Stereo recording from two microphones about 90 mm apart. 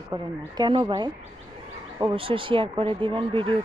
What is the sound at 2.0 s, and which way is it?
Speech, 85° right.